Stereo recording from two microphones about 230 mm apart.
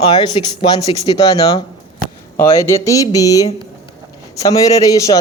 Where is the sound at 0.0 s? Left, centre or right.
Left.